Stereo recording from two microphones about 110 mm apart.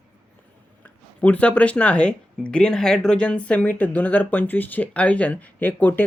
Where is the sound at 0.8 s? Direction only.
15° left (ahead or behind).